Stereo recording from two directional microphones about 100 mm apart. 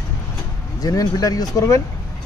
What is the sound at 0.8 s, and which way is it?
Speech, 40° left (ahead or behind).